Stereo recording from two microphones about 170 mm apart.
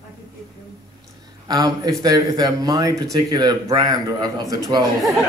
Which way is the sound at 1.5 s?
20° right (ahead or behind).